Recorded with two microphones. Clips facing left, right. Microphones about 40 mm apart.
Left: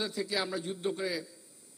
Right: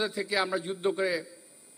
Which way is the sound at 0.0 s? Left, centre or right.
Centre.